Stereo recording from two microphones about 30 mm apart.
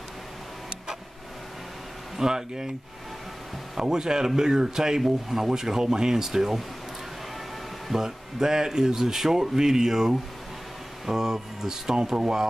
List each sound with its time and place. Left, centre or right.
2.1 s speech: centre
3.7 s speech: right
5.0 s speech: centre
7.9 s speech: centre